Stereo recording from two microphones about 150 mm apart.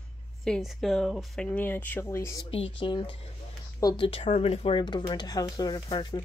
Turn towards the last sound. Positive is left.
turn(degrees=30)  # may be behind; listen again after turning